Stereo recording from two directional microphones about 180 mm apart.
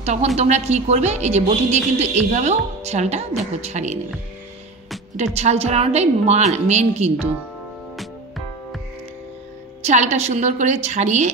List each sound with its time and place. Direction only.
0.0 s a woman's voice: 35° right (ahead or behind)
5.1 s speech: 35° right (ahead or behind)
9.8 s speech: 40° right (ahead or behind)